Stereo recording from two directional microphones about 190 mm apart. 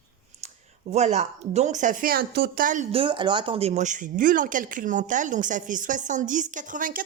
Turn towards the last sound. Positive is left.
turn(degrees=-45)  # may be behind; listen again after turning